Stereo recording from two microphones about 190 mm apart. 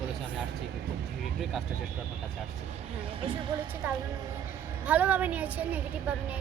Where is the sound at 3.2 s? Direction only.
25° right (ahead or behind).